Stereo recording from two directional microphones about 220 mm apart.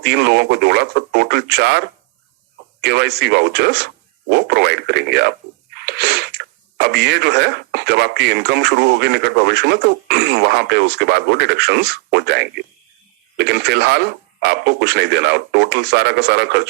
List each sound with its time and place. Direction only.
0.0 s speech: 50° right (ahead or behind)
2.8 s speech: 50° right (ahead or behind)